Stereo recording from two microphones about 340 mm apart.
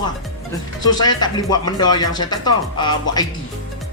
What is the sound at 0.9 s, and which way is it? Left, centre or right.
Speech, centre.